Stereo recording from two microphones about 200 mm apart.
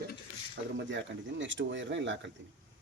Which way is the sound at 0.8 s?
65° right (ahead or behind).